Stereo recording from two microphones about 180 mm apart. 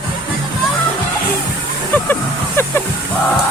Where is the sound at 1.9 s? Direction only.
10° left (ahead or behind).